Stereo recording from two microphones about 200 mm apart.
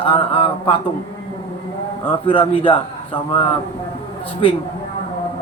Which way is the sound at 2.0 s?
25° left (ahead or behind).